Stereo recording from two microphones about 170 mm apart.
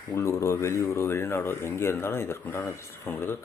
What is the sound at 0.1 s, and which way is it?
Speech, 15° left (ahead or behind).